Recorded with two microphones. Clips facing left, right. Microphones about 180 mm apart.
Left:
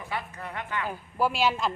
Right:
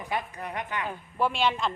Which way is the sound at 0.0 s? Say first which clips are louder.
Right 3 dB; 15° right (ahead or behind).